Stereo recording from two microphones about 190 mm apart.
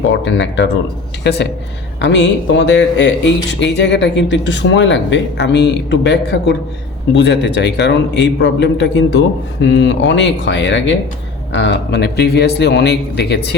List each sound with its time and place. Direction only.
0.1 s speech: 70° left (ahead or behind)
1.2 s a man's voice: 60° left (ahead or behind)